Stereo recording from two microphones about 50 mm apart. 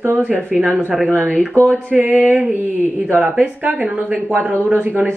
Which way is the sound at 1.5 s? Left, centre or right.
Left.